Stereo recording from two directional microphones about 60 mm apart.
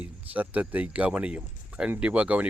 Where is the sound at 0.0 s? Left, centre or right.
Right.